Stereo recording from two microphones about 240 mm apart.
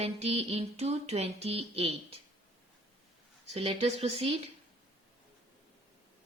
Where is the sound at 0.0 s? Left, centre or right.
Right.